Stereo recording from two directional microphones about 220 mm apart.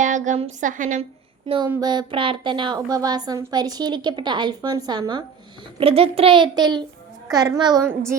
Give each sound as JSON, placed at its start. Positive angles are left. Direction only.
{"t": 0.0, "sound": "a sound", "side_deg": -35}
{"t": 0.6, "sound": "a woman's voice", "side_deg": -35}
{"t": 1.5, "sound": "a woman's voice", "side_deg": -20}